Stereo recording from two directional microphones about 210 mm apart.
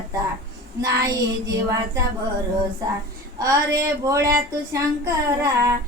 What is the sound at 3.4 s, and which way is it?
Speech, 15° right (ahead or behind).